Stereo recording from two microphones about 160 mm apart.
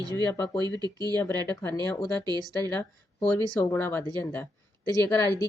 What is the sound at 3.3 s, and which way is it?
Speech, 15° left (ahead or behind).